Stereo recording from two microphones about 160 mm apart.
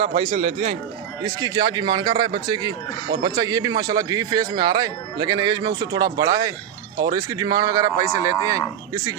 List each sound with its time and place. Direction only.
0.3 s a man's voice: 45° right (ahead or behind)
1.2 s speech: 25° right (ahead or behind)